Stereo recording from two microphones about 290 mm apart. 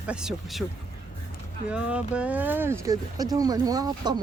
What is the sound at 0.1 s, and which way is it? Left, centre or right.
Speech, centre.